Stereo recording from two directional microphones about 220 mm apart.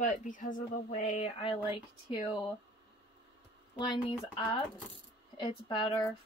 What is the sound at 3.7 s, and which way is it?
Speech, 20° left (ahead or behind).